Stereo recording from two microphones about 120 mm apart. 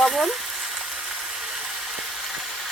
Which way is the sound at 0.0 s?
Centre (ahead or behind).